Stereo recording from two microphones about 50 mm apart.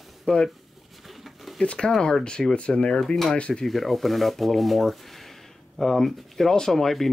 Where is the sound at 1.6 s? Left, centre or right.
Centre.